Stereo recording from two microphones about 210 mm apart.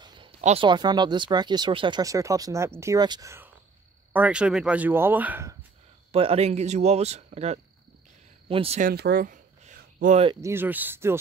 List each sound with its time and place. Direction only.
0.0 s a sound: 20° right (ahead or behind)
0.4 s speech: 30° right (ahead or behind); by 5.6 s 10° right (ahead or behind)
6.1 s speech: 30° right (ahead or behind)
8.8 s speech: 50° right (ahead or behind)
10.4 s speech: 10° right (ahead or behind)